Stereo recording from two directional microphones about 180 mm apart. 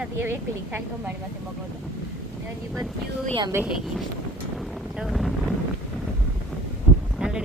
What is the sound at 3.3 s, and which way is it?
Speech, 25° right (ahead or behind).